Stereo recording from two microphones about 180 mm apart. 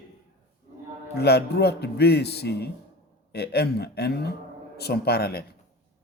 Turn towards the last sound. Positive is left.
turn(degrees=60)  # may be behind; listen again after turning